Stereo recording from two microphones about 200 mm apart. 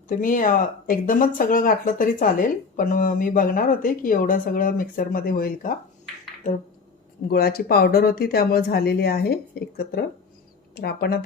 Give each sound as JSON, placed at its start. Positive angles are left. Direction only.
{"t": 0.1, "sound": "speech", "side_deg": 40}
{"t": 7.3, "sound": "speech", "side_deg": 50}